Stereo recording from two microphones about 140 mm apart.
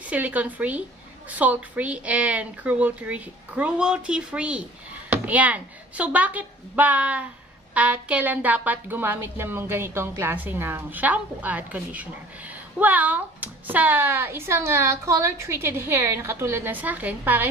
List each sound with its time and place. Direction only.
0.0 s speech: 10° right (ahead or behind)